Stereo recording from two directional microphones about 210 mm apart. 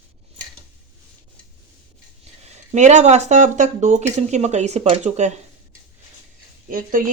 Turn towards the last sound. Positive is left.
turn(degrees=-40)  # may be behind; listen again after turning